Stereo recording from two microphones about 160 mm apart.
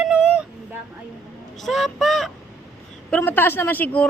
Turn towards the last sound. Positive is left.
turn(degrees=10)  # may be behind; listen again after turning